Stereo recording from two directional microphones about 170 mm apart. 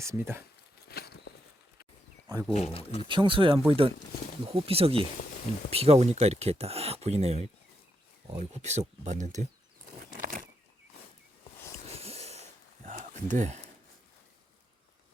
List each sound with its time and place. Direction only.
0.0 s speech: 15° right (ahead or behind)
0.9 s walk: 70° left (ahead or behind)
2.5 s speech: 35° left (ahead or behind)
3.1 s speech: 30° right (ahead or behind); by 9.5 s 45° right (ahead or behind)
10.1 s a sound: 50° right (ahead or behind)
11.9 s a sound: 35° right (ahead or behind)